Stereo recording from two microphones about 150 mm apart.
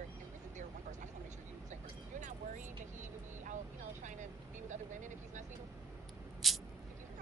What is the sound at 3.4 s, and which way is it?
Vehicle, 55° right (ahead or behind).